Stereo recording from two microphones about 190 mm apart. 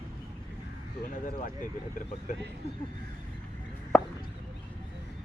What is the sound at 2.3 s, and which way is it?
Speech, 45° left (ahead or behind).